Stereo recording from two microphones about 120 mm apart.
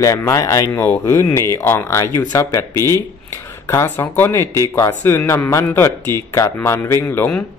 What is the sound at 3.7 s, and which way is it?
Speech, 20° left (ahead or behind).